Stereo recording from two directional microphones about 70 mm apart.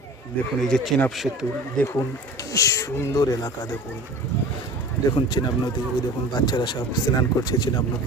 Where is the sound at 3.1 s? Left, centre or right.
Left.